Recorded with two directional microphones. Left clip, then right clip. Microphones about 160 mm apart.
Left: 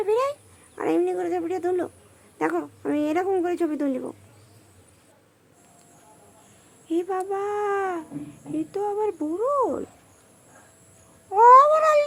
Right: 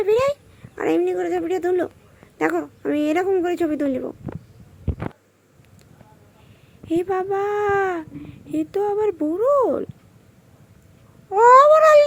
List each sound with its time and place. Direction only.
0.0 s a sound: 15° right (ahead or behind)
0.8 s a child's voice: 15° right (ahead or behind)
6.8 s a child's voice: 20° right (ahead or behind)
11.3 s a child's voice: 15° right (ahead or behind)